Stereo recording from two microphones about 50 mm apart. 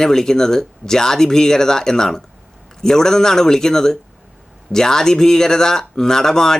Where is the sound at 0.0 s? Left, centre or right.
Centre.